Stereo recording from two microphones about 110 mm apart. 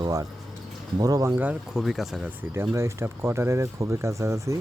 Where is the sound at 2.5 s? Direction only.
25° right (ahead or behind).